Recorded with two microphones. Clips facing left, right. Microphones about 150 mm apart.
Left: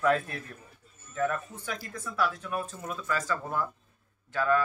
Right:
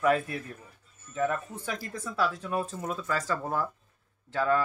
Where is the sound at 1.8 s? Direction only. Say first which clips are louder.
Even; 30° right (ahead or behind).